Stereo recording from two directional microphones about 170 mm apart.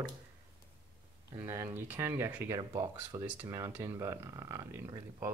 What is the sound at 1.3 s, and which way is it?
Speech, 15° right (ahead or behind).